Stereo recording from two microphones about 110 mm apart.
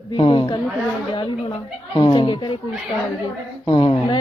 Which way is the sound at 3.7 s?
50° left (ahead or behind).